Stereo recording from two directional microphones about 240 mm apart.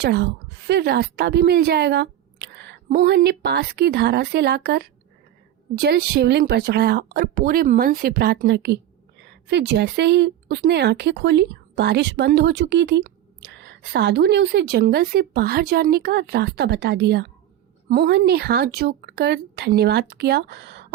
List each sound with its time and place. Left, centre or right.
0.0 s a woman's voice: right